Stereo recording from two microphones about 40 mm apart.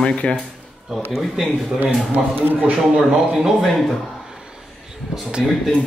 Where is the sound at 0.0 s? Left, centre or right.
Left.